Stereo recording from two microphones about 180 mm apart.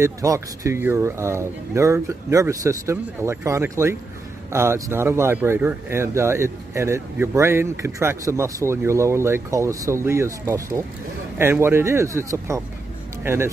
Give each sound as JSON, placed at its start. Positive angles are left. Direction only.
{"t": 0.0, "sound": "speech", "side_deg": -15}